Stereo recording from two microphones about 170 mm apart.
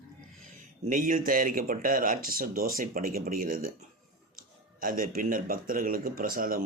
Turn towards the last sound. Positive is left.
turn(degrees=-55)  # may be behind; listen again after turning